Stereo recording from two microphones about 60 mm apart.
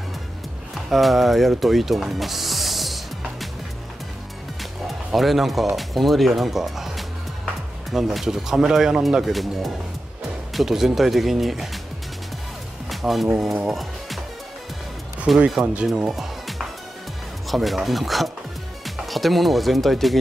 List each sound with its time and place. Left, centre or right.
0.8 s speech: centre
1.5 s music: centre
4.8 s speech: centre
9.2 s speech: centre
12.9 s speech: centre
13.7 s music: centre
15.3 s speech: centre
15.6 s speech: right
16.1 s music: centre
17.5 s speech: centre